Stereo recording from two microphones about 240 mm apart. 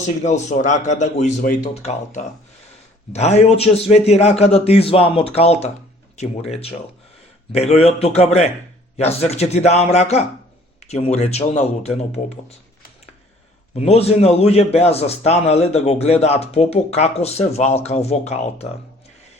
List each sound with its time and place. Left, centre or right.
0.2 s a man's voice: left
13.7 s a man's voice: left